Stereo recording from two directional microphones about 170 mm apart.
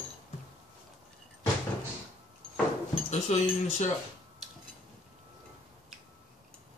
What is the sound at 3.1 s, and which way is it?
Speech, 40° left (ahead or behind).